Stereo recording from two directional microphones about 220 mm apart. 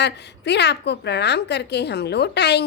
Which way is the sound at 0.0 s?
50° left (ahead or behind).